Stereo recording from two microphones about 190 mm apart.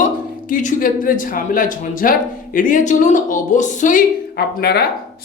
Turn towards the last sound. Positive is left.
turn(degrees=55)  # may be behind; listen again after turning